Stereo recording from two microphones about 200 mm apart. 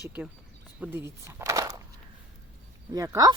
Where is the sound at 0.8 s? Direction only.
10° right (ahead or behind).